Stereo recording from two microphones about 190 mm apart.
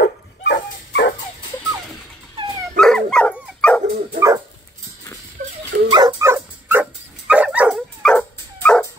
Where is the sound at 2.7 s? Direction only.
5° left (ahead or behind).